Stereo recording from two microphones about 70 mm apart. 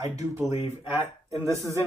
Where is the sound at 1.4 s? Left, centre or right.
Right.